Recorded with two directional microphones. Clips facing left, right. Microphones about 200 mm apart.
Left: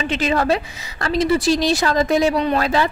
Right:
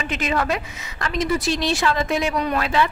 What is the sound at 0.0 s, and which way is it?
A woman's voice, 30° left (ahead or behind).